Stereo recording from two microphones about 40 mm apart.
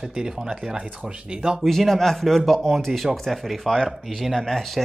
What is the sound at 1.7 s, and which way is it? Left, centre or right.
Speech, centre.